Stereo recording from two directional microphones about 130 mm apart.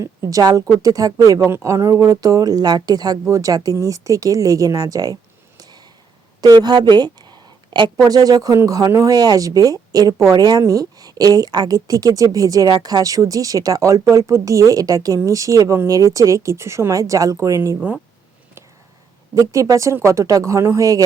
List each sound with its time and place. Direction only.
0.0 s a woman's voice: 25° right (ahead or behind)
5.5 s a sound: 30° right (ahead or behind)
8.0 s a woman's voice: 30° right (ahead or behind)
19.3 s a woman's voice: 25° right (ahead or behind)